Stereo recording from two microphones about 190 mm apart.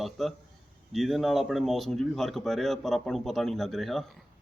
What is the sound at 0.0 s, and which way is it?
Speech, centre (ahead or behind).